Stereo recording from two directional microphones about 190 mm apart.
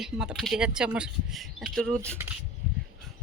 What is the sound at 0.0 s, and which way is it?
Speech, 5° right (ahead or behind).